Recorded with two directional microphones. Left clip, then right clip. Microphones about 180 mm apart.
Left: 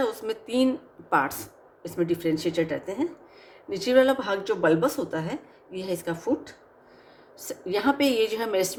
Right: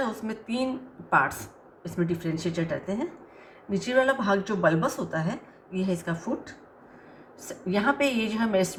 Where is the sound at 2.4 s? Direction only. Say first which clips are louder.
Left 3 dB; 40° left (ahead or behind).